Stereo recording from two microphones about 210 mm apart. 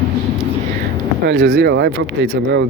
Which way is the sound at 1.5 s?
55° right (ahead or behind).